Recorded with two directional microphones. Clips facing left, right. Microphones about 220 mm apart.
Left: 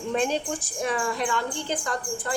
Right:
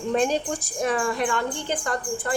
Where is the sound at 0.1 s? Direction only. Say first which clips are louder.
Right 3 dB; 40° right (ahead or behind).